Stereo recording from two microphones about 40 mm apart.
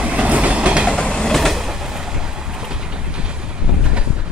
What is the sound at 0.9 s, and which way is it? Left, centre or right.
Train, centre.